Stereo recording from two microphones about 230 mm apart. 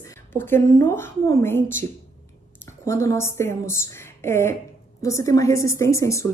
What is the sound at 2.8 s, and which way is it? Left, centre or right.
A woman's voice, centre.